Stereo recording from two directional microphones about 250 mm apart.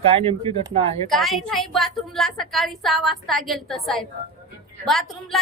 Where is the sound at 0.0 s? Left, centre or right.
Right.